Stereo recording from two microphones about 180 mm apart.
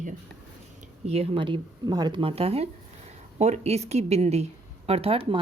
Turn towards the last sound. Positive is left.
turn(degrees=-30)  # may be behind; listen again after turning